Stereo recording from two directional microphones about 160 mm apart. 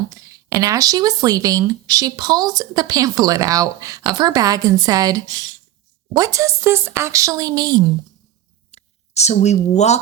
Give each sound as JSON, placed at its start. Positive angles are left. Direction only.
{"t": 0.1, "sound": "speech", "side_deg": -20}
{"t": 8.7, "sound": "speech", "side_deg": 45}